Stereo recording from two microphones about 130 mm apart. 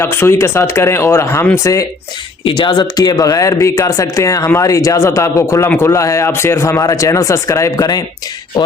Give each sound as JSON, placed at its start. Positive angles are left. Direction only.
{"t": 0.0, "sound": "speech", "side_deg": 20}
{"t": 2.4, "sound": "speech", "side_deg": 40}